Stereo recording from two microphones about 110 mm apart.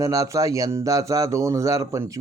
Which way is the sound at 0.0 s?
30° right (ahead or behind).